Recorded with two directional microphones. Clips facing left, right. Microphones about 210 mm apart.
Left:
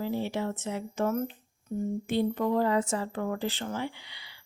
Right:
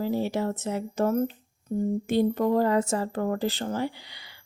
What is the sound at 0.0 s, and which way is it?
Speech, 40° right (ahead or behind).